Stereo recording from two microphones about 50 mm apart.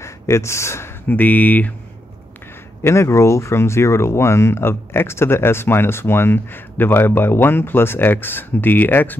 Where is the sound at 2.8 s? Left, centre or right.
Left.